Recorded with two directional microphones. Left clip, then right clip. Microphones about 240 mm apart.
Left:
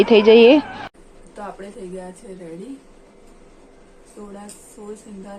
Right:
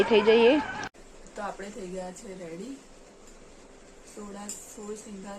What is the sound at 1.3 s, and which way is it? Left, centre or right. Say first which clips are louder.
Speech: left 3 dB; centre.